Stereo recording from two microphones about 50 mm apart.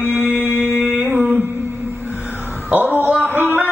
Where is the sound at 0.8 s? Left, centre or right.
Right.